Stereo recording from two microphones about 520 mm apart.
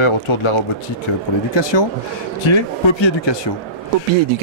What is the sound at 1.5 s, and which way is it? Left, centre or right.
Speech, left.